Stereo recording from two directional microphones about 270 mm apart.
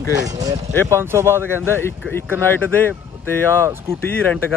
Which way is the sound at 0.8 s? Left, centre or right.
Centre.